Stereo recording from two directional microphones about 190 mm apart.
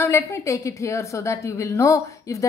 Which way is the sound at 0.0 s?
15° left (ahead or behind).